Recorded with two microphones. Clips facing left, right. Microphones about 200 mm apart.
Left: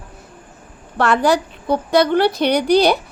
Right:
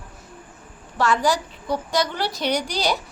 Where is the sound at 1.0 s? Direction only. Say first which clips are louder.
Left 5 dB; 60° left (ahead or behind).